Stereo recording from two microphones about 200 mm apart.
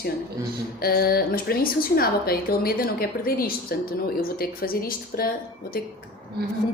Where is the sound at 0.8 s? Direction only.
50° left (ahead or behind).